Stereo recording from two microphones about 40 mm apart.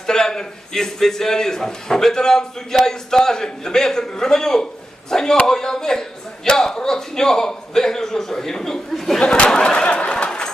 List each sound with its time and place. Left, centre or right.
0.1 s a man's voice: centre
9.3 s a man's voice: centre
9.6 s a sound: left